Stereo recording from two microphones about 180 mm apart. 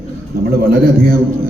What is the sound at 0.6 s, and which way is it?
Speech, 55° right (ahead or behind).